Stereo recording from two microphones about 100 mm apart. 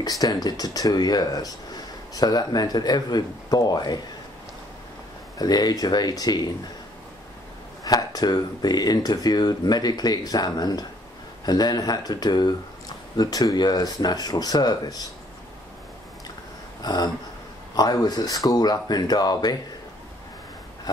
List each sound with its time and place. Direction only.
0.0 s speech: 40° left (ahead or behind)
5.4 s speech: 40° left (ahead or behind)
7.8 s speech: 40° left (ahead or behind)
16.8 s speech: 45° left (ahead or behind)